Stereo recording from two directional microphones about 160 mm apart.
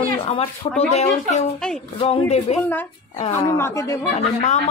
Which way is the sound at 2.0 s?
40° left (ahead or behind).